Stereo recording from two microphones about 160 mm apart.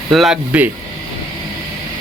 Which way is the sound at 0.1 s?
Centre (ahead or behind).